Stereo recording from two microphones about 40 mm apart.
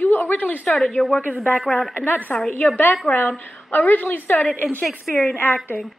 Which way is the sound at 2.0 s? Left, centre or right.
Left.